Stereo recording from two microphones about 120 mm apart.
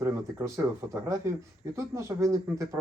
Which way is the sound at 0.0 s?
25° right (ahead or behind).